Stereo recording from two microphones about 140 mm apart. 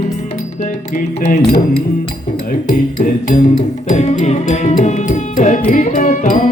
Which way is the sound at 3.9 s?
55° left (ahead or behind).